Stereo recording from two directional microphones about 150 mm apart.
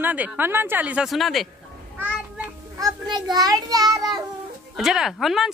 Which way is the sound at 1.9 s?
10° right (ahead or behind).